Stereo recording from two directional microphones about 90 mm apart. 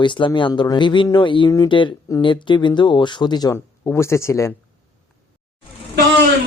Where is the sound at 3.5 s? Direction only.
30° left (ahead or behind).